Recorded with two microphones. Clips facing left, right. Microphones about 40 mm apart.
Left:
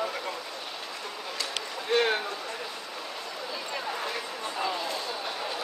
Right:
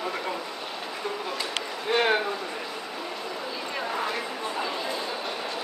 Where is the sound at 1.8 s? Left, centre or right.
Centre.